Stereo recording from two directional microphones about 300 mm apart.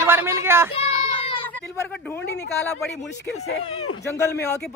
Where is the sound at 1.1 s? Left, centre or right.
Centre.